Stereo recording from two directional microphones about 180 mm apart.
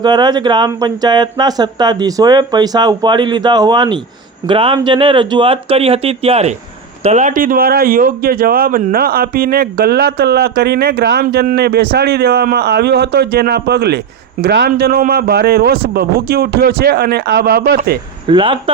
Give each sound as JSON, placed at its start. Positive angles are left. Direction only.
{"t": 0.0, "sound": "a man's voice", "side_deg": -25}
{"t": 18.3, "sound": "speech", "side_deg": -30}